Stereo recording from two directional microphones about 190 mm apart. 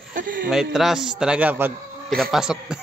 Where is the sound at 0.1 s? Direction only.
45° right (ahead or behind).